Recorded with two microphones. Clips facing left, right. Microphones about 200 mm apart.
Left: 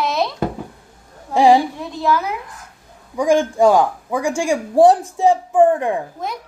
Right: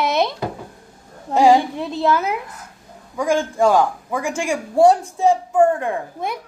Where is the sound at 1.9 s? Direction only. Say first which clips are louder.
Right 2 dB; 25° right (ahead or behind).